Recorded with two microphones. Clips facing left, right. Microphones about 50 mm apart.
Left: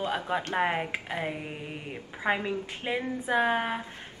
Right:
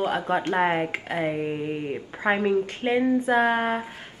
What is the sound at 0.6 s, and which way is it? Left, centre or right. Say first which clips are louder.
Speech: right 5 dB; centre.